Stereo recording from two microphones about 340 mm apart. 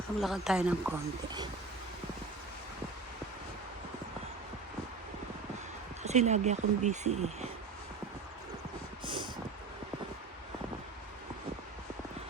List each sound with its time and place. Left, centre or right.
0.2 s speech: centre
6.0 s speech: centre
9.0 s vehicle: centre